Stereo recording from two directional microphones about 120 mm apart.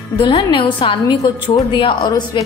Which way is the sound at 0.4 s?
45° left (ahead or behind).